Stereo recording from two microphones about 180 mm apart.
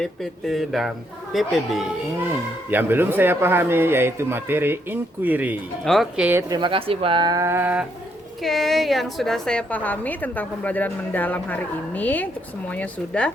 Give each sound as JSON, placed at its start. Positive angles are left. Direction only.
{"t": 0.0, "sound": "speech", "side_deg": 0}
{"t": 2.6, "sound": "speech", "side_deg": -10}
{"t": 6.5, "sound": "a woman's voice", "side_deg": -25}